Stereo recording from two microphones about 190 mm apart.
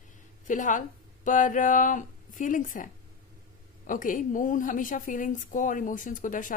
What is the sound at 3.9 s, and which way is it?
A woman's voice, 45° left (ahead or behind).